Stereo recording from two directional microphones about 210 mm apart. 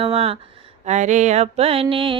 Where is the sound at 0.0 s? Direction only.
25° right (ahead or behind).